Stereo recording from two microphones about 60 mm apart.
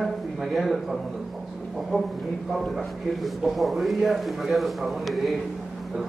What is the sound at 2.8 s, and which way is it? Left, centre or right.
A man's voice, centre.